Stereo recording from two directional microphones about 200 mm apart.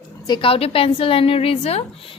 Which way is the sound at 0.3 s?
25° left (ahead or behind).